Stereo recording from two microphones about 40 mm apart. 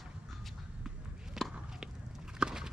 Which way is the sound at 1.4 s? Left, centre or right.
Centre.